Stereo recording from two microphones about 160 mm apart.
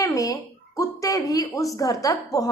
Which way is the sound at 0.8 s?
20° left (ahead or behind).